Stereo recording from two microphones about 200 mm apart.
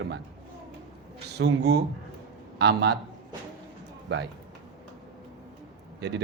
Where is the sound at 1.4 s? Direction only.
55° right (ahead or behind).